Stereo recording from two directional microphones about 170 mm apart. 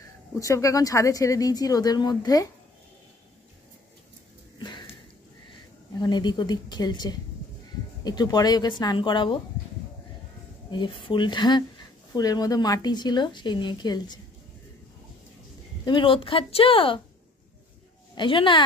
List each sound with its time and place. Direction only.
0.4 s a woman's voice: 20° left (ahead or behind)
4.6 s a sound: 25° left (ahead or behind)
5.9 s a woman's voice: 25° left (ahead or behind)
10.7 s a woman's voice: 30° left (ahead or behind)
15.8 s speech: 30° left (ahead or behind)
18.1 s a woman's voice: 30° left (ahead or behind)